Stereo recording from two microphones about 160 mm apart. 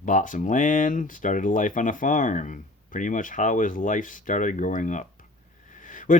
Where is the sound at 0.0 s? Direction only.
55° left (ahead or behind).